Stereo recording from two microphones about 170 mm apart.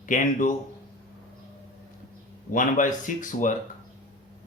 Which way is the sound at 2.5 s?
50° left (ahead or behind).